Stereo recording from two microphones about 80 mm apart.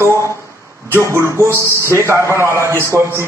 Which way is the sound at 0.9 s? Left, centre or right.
Right.